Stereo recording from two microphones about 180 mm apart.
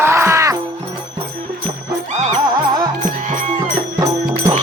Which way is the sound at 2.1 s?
40° right (ahead or behind).